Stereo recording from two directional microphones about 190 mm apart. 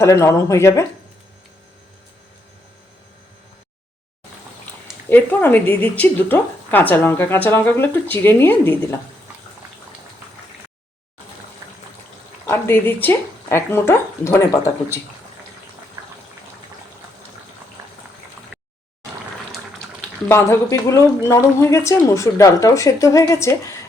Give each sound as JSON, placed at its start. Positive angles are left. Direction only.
{"t": 0.0, "sound": "speech", "side_deg": 15}
{"t": 4.6, "sound": "speech", "side_deg": 10}
{"t": 11.6, "sound": "water", "side_deg": -20}
{"t": 12.5, "sound": "speech", "side_deg": 10}
{"t": 20.2, "sound": "speech", "side_deg": 15}